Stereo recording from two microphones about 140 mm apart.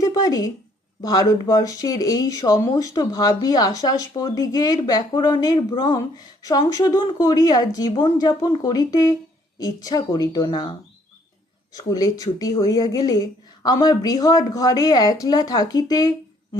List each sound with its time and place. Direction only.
0.0 s speech: 25° left (ahead or behind)